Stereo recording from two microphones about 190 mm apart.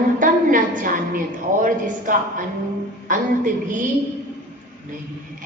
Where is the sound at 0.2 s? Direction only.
45° right (ahead or behind).